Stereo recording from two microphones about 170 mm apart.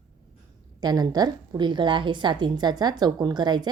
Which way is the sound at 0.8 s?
25° right (ahead or behind).